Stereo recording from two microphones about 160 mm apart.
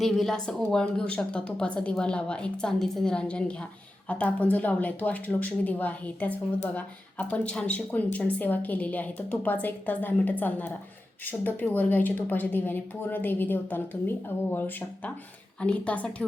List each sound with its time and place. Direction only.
0.0 s a woman's voice: centre (ahead or behind)